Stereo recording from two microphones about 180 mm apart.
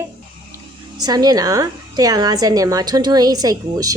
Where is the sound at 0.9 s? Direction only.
20° right (ahead or behind).